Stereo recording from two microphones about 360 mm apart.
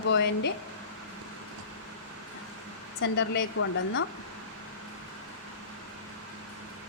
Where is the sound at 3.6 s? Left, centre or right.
Left.